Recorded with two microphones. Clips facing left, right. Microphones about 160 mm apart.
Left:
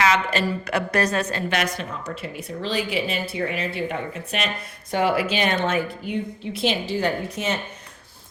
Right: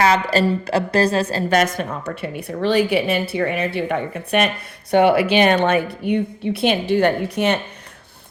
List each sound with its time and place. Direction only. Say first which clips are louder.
0.0 s a woman's voice: right 5 dB; 35° right (ahead or behind); by 7.6 s 65° right (ahead or behind)